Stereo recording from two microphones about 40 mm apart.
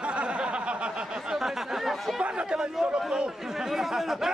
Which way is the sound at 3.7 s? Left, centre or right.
Centre.